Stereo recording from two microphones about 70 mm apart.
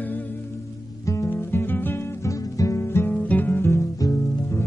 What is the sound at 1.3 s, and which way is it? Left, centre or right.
Music, left.